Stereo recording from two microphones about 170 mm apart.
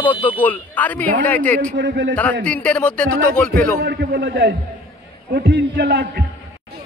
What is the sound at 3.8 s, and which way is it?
Speech, 70° right (ahead or behind).